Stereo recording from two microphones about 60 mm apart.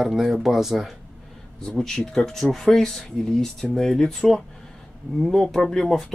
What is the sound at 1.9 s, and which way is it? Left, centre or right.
Speech, centre.